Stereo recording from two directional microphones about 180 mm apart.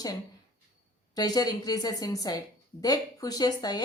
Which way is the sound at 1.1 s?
20° left (ahead or behind).